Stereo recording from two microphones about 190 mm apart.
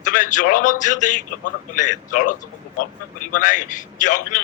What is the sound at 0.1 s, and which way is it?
A man's voice, 45° left (ahead or behind).